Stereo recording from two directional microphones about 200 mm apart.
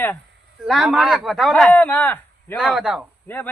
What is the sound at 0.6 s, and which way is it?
Speech, centre (ahead or behind).